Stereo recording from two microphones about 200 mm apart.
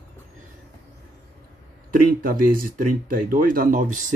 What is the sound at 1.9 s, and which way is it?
Speech, 45° right (ahead or behind).